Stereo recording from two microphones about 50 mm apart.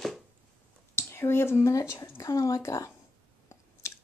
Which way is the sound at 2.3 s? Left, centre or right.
Left.